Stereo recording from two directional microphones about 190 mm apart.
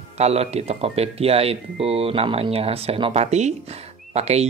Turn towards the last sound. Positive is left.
turn(degrees=-35)  # may be behind; listen again after turning